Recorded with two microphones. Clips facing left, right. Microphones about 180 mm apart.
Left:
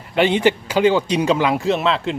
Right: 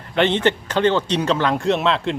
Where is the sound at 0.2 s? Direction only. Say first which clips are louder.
Left 2 dB; 10° left (ahead or behind).